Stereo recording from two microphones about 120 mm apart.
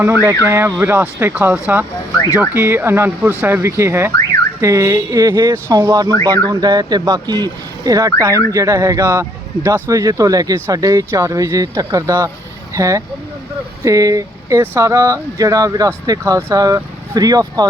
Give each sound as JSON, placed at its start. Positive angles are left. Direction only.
{"t": 0.0, "sound": "speech", "side_deg": -20}